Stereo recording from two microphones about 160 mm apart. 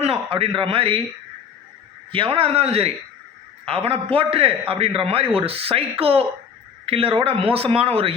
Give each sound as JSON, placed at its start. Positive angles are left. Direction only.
{"t": 0.0, "sound": "a man's voice", "side_deg": -40}
{"t": 2.1, "sound": "a man's voice", "side_deg": -35}